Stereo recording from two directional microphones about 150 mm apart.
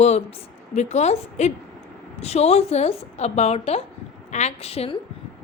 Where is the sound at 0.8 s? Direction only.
50° left (ahead or behind).